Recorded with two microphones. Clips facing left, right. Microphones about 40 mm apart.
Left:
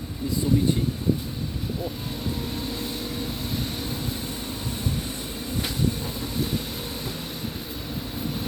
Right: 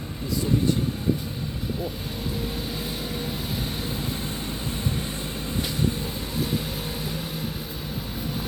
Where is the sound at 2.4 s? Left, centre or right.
Centre.